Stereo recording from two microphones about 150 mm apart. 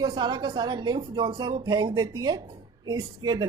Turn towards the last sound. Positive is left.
turn(degrees=-30)  # may be behind; listen again after turning